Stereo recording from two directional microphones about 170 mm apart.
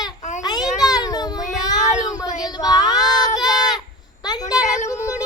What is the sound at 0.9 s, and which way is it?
Child singing, 20° left (ahead or behind).